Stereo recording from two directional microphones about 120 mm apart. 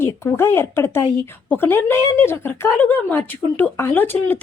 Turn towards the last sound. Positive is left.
turn(degrees=15)  # may be behind; listen again after turning